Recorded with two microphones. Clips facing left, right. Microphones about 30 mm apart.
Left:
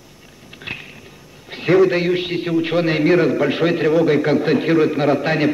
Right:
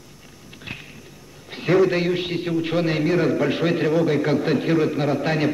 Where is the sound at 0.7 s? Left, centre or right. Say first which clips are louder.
Left 6 dB; left.